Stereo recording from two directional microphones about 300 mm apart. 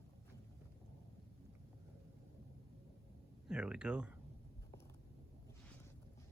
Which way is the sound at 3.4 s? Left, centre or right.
Centre.